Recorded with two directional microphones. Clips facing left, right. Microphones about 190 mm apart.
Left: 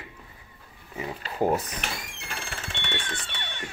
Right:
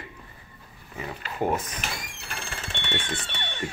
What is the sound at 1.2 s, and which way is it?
Speech, 35° left (ahead or behind).